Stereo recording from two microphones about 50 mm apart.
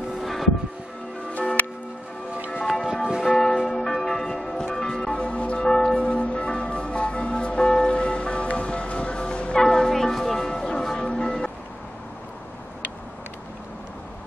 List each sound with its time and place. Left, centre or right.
0.2 s music: centre
3.2 s church bell: centre
11.1 s vehicle: centre